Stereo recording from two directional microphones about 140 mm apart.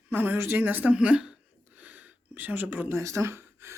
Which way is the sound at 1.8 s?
10° right (ahead or behind).